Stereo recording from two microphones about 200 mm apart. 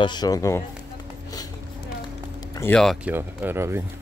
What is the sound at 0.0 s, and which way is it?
Speech, 20° left (ahead or behind).